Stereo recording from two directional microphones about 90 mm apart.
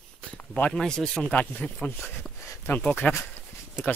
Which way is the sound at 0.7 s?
5° left (ahead or behind).